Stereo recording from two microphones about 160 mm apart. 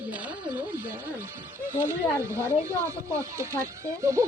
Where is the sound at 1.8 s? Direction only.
15° right (ahead or behind).